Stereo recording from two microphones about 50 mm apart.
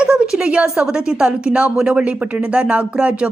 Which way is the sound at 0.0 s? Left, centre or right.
Centre.